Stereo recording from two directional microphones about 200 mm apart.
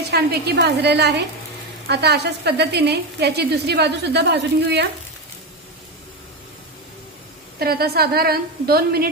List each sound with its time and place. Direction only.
0.1 s a woman's voice: 55° right (ahead or behind)
7.5 s a woman's voice: 50° right (ahead or behind)